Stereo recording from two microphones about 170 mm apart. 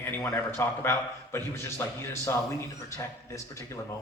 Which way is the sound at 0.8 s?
15° left (ahead or behind).